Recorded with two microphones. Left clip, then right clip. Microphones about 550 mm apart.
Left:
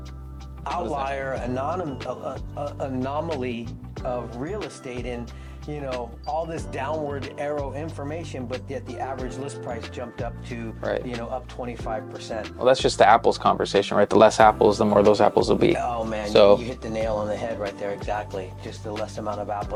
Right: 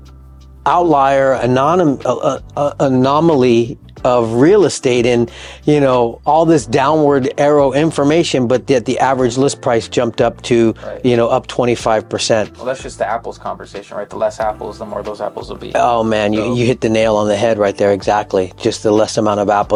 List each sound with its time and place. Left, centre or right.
0.6 s speech: right
4.0 s speech: right
12.6 s speech: left
15.8 s speech: right